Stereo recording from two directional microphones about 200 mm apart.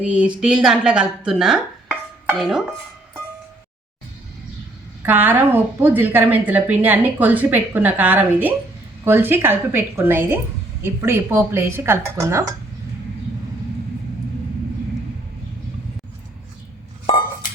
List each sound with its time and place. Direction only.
0.0 s a woman's voice: 5° right (ahead or behind)
5.0 s a woman's voice: 10° right (ahead or behind)